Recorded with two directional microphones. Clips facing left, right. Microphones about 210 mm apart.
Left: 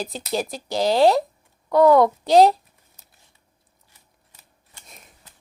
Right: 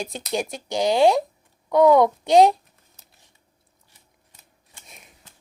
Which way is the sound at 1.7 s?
20° right (ahead or behind).